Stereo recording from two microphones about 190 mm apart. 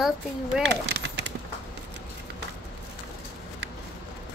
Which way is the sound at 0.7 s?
65° right (ahead or behind).